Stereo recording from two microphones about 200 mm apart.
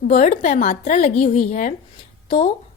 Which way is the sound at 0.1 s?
35° left (ahead or behind).